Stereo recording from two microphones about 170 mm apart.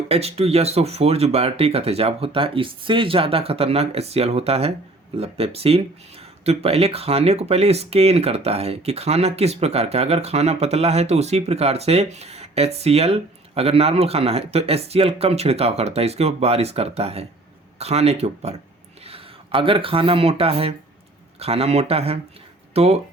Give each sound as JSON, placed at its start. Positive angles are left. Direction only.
{"t": 0.1, "sound": "speech", "side_deg": -35}